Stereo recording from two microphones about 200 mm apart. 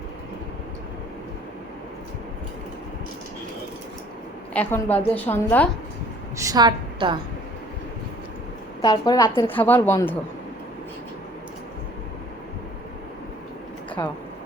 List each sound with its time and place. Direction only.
4.5 s a woman's voice: 10° left (ahead or behind)
6.4 s a woman's voice: 20° right (ahead or behind)
8.8 s a woman's voice: 20° left (ahead or behind)